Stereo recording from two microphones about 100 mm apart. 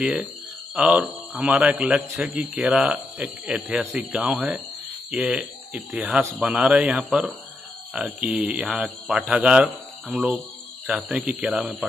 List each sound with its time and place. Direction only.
0.0 s a man's voice: 10° right (ahead or behind)